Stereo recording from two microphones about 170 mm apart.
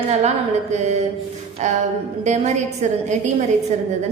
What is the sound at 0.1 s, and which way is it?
A woman's voice, 40° right (ahead or behind).